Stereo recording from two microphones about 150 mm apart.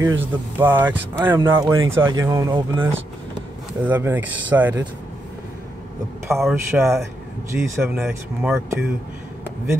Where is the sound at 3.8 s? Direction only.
10° right (ahead or behind).